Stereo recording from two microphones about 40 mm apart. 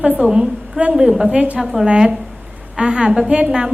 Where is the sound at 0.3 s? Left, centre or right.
Right.